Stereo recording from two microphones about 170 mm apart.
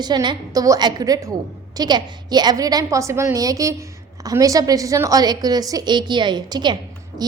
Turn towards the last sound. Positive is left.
turn(degrees=-25)  # may be behind; listen again after turning